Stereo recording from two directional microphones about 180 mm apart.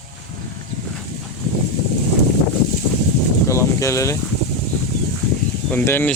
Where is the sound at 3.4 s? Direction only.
15° left (ahead or behind).